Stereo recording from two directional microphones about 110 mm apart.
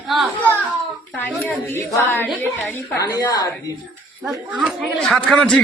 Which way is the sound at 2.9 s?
35° left (ahead or behind).